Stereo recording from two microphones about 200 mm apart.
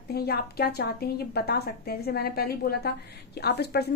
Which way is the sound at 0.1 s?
50° left (ahead or behind).